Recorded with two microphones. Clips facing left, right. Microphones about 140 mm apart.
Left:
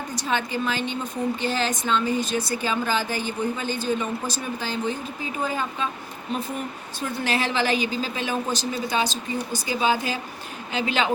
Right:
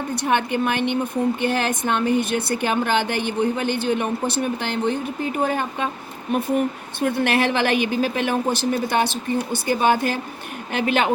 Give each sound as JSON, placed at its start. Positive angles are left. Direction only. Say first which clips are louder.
{"t": 0.1, "sound": "a woman's voice", "louder": "right 5 dB", "side_deg": -60}
{"t": 7.0, "sound": "a woman's voice", "louder": "right 6 dB", "side_deg": -60}